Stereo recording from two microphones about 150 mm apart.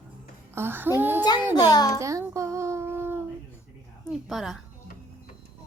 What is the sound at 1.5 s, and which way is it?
Speech, 25° left (ahead or behind).